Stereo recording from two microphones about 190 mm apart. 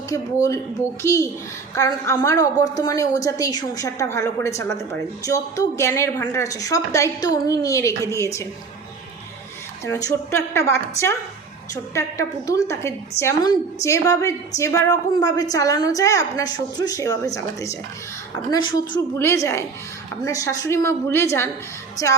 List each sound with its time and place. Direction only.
0.1 s a woman's voice: 15° left (ahead or behind)
1.7 s a woman's voice: 15° left (ahead or behind)
9.8 s a woman's voice: 15° left (ahead or behind)
19.1 s a woman's voice: 15° left (ahead or behind)